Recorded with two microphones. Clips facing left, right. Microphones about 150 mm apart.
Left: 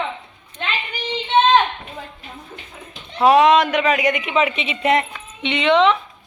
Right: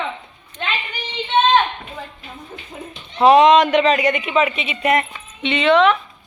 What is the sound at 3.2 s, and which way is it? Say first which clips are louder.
Speech: right 2 dB; 5° left (ahead or behind).